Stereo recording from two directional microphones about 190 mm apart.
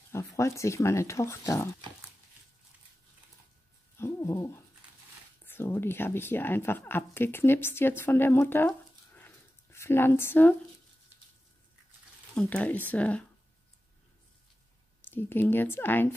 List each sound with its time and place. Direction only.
0.1 s speech: 15° left (ahead or behind)
3.9 s a sound: 15° left (ahead or behind)
5.4 s a woman's voice: 10° left (ahead or behind)
12.4 s speech: 5° left (ahead or behind)
15.0 s speech: 10° left (ahead or behind)